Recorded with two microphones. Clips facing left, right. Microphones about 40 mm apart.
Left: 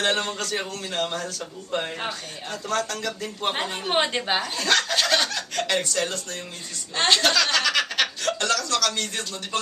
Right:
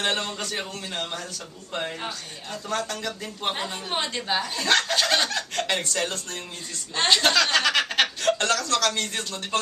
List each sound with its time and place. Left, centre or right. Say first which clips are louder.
0.0 s a man's voice: left 2 dB; centre
2.7 s speech: left 2 dB; centre
3.5 s a woman's voice: left 5 dB; left
4.6 s speech: right 1 dB; centre
5.0 s fowl: left 1 dB; centre
5.7 s speech: left 4 dB; centre
7.0 s a man's voice: left 1 dB; centre
7.5 s a sound: right 1 dB; centre